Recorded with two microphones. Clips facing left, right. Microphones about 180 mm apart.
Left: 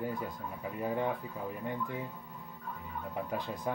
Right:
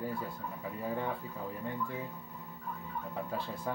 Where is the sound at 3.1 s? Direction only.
15° left (ahead or behind).